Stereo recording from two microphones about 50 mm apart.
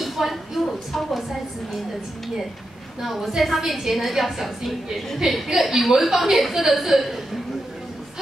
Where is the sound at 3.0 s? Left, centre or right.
Centre.